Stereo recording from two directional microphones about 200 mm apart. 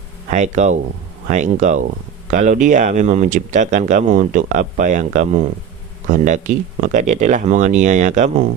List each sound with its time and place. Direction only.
0.3 s speech: 35° right (ahead or behind)